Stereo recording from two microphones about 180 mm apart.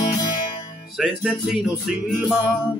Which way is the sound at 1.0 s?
5° right (ahead or behind).